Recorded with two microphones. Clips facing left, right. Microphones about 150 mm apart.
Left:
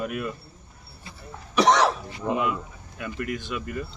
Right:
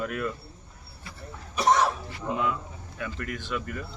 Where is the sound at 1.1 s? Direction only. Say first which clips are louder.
Even; 25° left (ahead or behind).